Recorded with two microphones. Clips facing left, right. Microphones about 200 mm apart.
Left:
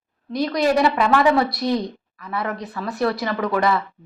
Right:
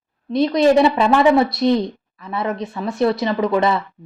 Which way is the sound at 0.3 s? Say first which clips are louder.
Right 5 dB; 25° right (ahead or behind).